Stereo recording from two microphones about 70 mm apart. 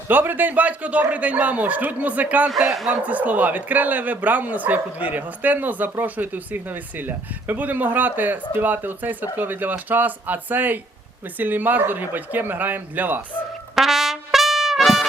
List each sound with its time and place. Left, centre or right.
0.1 s speech: right
13.7 s trumpet: centre